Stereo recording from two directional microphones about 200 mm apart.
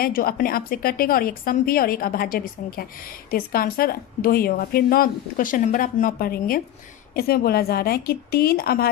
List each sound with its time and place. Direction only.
0.0 s a woman's voice: 45° left (ahead or behind)